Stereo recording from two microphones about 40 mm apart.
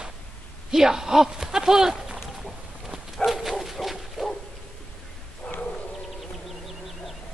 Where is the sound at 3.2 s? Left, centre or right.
Centre.